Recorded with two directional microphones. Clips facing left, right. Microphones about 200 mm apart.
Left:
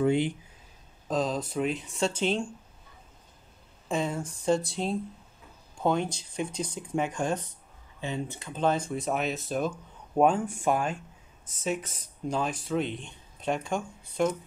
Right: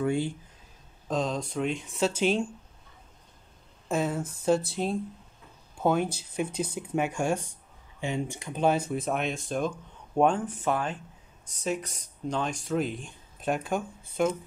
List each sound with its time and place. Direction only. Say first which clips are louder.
0.0 s speech: left 3 dB; 20° left (ahead or behind)
1.0 s speech: left 1 dB; centre (ahead or behind)
3.9 s speech: right 1 dB; 5° right (ahead or behind)